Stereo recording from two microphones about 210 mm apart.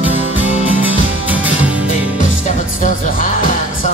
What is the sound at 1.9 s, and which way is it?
Music, 35° left (ahead or behind).